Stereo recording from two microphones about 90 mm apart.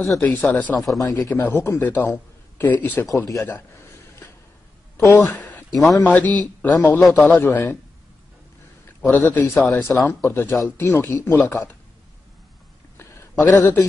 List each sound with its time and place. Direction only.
0.2 s speech: 20° left (ahead or behind)
0.7 s a man's voice: centre (ahead or behind)
1.3 s a man's voice: 25° left (ahead or behind)
5.1 s a sound: 20° left (ahead or behind)
5.7 s speech: centre (ahead or behind)
5.9 s a man's voice: 20° left (ahead or behind)
7.0 s a man's voice: centre (ahead or behind)
7.4 s a man's voice: 25° left (ahead or behind)
9.0 s a man's voice: 25° left (ahead or behind)
12.9 s a sound: 25° left (ahead or behind)